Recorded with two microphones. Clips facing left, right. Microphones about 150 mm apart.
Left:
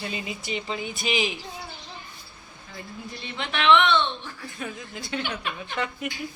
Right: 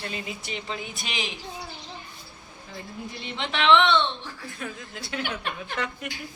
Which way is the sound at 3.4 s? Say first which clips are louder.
Even; 30° right (ahead or behind).